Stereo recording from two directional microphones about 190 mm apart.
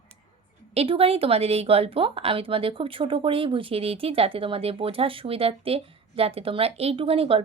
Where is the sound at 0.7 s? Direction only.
30° right (ahead or behind).